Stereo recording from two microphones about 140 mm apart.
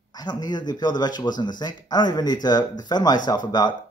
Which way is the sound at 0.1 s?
30° left (ahead or behind).